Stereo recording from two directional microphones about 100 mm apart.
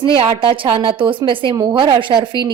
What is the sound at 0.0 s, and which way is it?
A woman's voice, 65° right (ahead or behind).